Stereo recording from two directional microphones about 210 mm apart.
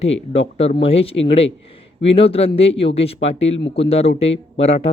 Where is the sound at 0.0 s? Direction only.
30° left (ahead or behind).